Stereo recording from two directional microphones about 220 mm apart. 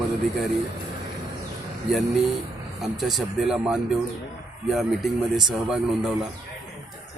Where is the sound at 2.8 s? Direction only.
Centre (ahead or behind).